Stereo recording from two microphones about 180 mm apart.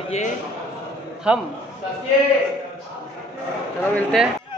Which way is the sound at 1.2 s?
5° right (ahead or behind).